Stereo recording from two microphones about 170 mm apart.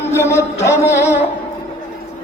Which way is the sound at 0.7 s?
15° left (ahead or behind).